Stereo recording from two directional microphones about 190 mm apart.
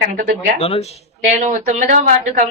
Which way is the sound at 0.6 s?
30° left (ahead or behind).